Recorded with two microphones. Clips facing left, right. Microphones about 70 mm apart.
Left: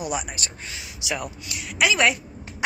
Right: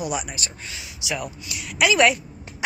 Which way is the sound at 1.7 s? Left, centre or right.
Centre.